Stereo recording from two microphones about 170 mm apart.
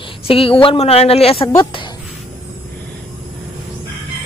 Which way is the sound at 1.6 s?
30° left (ahead or behind).